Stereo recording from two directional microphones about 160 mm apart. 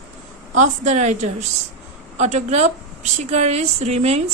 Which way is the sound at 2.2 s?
45° right (ahead or behind).